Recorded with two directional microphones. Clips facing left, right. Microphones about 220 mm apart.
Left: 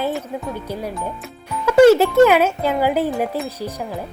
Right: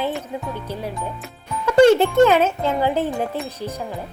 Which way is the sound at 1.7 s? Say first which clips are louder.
Left 2 dB; 5° left (ahead or behind).